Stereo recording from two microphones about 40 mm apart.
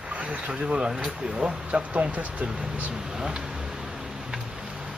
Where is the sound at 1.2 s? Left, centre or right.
Centre.